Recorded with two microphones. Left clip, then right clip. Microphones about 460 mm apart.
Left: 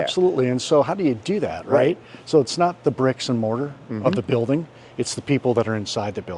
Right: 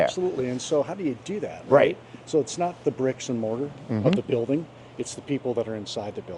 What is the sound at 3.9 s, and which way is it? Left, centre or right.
Speech, centre.